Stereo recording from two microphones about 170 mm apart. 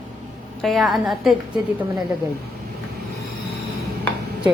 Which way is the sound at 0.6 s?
Centre (ahead or behind).